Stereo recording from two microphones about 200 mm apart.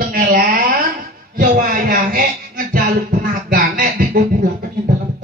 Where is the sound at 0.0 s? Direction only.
45° right (ahead or behind).